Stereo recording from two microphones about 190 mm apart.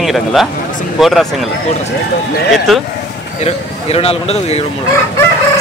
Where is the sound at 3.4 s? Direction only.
30° left (ahead or behind).